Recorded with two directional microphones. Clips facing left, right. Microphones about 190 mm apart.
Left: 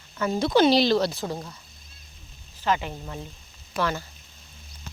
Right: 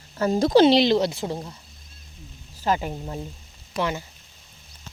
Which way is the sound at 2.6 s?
40° right (ahead or behind).